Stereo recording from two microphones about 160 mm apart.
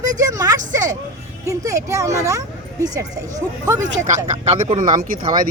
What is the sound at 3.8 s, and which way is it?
Speech, 50° right (ahead or behind).